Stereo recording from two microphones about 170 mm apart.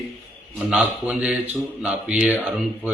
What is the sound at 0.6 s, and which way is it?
A man's voice, 5° right (ahead or behind).